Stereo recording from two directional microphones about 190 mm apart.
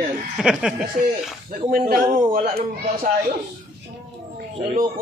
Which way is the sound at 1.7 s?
50° right (ahead or behind).